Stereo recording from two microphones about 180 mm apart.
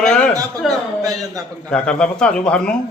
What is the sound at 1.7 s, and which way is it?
Speech, 5° left (ahead or behind).